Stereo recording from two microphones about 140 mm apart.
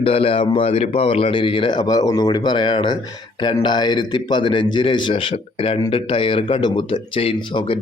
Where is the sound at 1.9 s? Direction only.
25° left (ahead or behind).